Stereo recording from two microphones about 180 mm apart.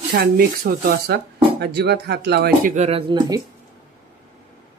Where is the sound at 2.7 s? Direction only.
40° right (ahead or behind).